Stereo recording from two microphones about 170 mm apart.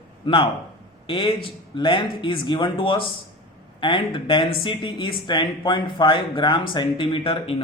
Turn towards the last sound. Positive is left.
turn(degrees=35)  # may be behind; listen again after turning